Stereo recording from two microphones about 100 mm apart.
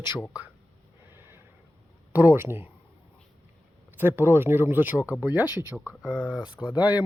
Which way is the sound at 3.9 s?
20° right (ahead or behind).